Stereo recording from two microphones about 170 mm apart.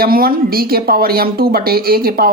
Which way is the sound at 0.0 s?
60° right (ahead or behind).